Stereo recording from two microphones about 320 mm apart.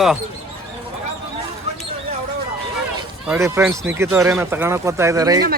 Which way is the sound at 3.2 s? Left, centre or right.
Centre.